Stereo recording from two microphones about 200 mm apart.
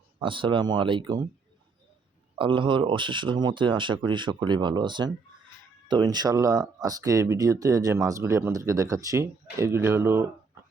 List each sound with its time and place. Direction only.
0.2 s speech: 25° right (ahead or behind)
2.4 s speech: 25° right (ahead or behind)